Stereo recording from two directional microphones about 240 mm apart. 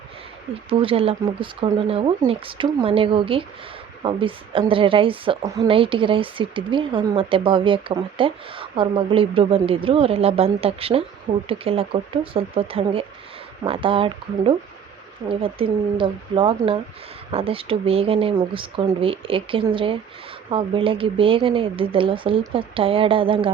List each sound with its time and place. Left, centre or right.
0.7 s speech: right